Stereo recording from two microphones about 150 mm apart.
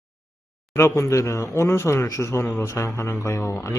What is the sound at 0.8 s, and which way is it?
Speech, 20° left (ahead or behind).